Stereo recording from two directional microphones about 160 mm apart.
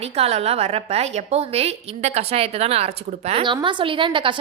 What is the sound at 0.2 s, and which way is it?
A woman's voice, 40° right (ahead or behind).